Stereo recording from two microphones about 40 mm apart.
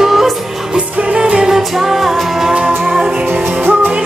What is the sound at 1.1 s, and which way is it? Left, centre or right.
Music, right.